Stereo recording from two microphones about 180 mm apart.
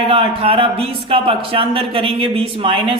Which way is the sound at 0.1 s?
30° right (ahead or behind).